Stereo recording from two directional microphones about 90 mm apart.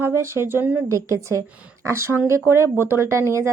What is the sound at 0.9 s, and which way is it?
A woman's voice, 35° right (ahead or behind).